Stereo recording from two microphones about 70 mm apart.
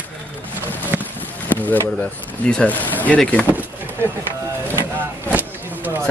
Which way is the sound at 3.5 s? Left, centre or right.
Right.